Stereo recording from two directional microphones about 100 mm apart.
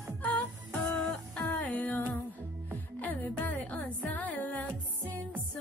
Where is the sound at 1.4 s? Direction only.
20° left (ahead or behind).